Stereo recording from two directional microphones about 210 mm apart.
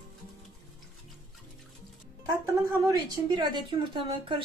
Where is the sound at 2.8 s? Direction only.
15° right (ahead or behind).